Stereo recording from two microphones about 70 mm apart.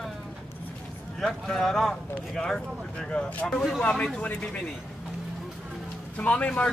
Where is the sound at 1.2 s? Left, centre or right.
Centre.